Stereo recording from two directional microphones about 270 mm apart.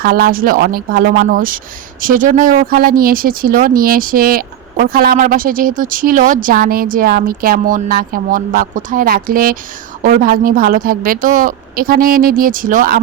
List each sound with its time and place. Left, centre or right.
0.0 s speech: right